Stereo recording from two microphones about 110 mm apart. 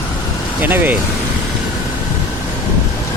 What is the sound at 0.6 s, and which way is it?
Speech, 15° right (ahead or behind).